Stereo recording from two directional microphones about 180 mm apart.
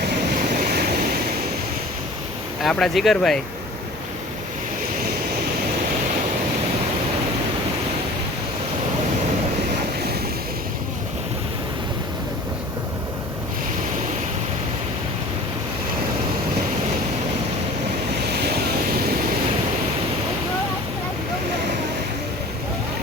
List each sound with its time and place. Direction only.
0.5 s waves: 55° right (ahead or behind)
2.6 s speech: centre (ahead or behind)
18.3 s waves: 65° right (ahead or behind)